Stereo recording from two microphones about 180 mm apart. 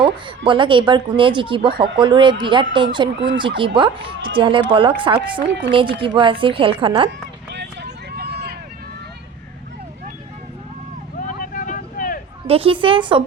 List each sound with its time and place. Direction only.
0.4 s a woman's voice: 25° right (ahead or behind)
1.7 s speech: 60° right (ahead or behind)
2.0 s a woman's voice: 25° right (ahead or behind)
5.5 s speech: 75° right (ahead or behind)
5.7 s a woman's voice: 30° right (ahead or behind)
7.5 s vehicle: 70° right (ahead or behind)
11.3 s vehicle: 50° left (ahead or behind)
12.5 s a woman's voice: 30° right (ahead or behind)